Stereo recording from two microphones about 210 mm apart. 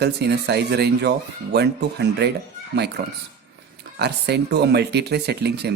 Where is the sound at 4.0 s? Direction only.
50° right (ahead or behind).